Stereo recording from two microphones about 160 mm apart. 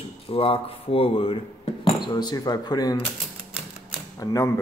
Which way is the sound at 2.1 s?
25° left (ahead or behind).